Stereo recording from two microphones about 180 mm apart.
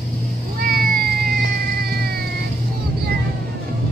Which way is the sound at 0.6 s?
55° right (ahead or behind).